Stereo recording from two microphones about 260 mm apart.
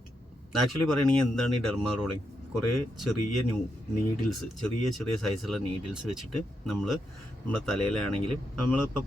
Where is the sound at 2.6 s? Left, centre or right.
Left.